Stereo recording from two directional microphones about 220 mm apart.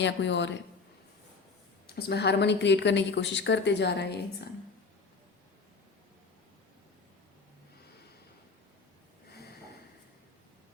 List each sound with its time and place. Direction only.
0.0 s a woman's voice: 55° left (ahead or behind)
2.0 s a woman's voice: 50° left (ahead or behind)